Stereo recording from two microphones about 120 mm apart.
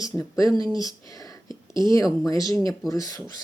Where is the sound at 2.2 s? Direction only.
30° left (ahead or behind).